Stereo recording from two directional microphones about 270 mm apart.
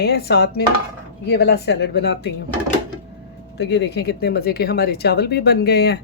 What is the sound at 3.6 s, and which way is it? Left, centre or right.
Speech, left.